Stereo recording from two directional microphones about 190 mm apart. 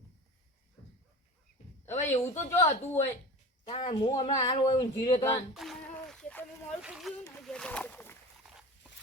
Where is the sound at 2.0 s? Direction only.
10° left (ahead or behind).